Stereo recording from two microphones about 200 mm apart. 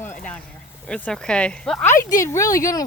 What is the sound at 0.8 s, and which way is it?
Speech, 5° left (ahead or behind).